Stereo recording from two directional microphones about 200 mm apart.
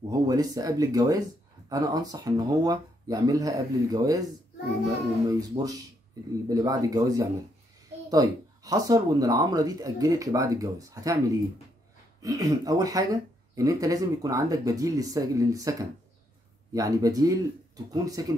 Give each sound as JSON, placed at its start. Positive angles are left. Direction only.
{"t": 0.1, "sound": "speech", "side_deg": -20}
{"t": 5.3, "sound": "speech", "side_deg": -20}